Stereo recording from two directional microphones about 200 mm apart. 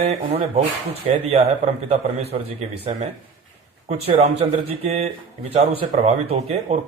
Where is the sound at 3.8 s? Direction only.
30° right (ahead or behind).